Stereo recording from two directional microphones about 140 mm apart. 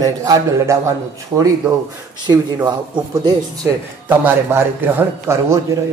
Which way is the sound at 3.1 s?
25° right (ahead or behind).